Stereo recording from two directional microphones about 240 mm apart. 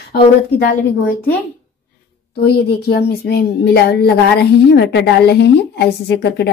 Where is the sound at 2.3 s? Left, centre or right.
Left.